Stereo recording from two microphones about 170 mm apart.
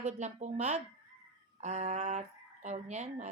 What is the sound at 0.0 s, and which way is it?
A woman's voice, 45° right (ahead or behind).